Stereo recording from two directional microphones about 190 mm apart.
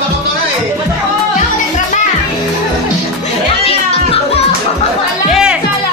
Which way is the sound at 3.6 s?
30° left (ahead or behind).